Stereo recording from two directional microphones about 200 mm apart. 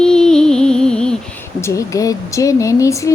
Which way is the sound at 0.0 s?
5° left (ahead or behind).